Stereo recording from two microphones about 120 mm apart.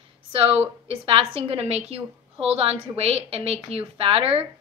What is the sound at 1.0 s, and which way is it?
A woman's voice, 50° right (ahead or behind).